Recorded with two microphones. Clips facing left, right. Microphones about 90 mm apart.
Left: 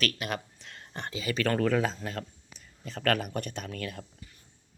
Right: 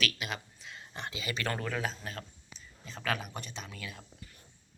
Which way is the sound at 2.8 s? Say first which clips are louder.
Left 7 dB; 65° left (ahead or behind).